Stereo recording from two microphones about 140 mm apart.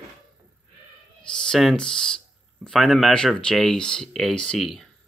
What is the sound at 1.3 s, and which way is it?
Speech, 5° left (ahead or behind).